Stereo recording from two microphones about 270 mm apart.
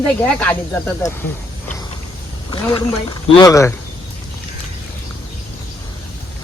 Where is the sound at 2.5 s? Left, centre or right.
Centre.